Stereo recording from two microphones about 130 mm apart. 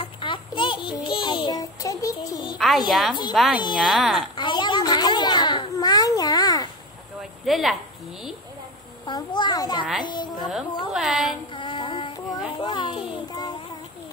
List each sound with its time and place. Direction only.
0.0 s child singing: 40° left (ahead or behind)
1.0 s music: 40° left (ahead or behind)
2.5 s a sound: centre (ahead or behind)
2.9 s speech: centre (ahead or behind)
4.4 s a sound: 35° left (ahead or behind)
7.4 s speech: centre (ahead or behind)
9.0 s a child's voice: 35° left (ahead or behind)
10.9 s a woman's voice: 5° right (ahead or behind)
11.5 s music: 40° left (ahead or behind)
12.5 s a sound: 35° left (ahead or behind)